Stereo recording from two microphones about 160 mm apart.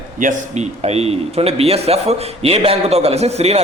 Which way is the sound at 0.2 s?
50° right (ahead or behind).